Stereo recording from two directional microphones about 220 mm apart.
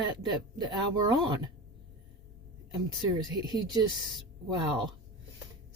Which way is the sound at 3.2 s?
20° right (ahead or behind).